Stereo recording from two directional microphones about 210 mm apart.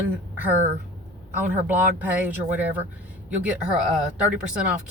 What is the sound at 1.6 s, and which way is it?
Speech, 5° right (ahead or behind).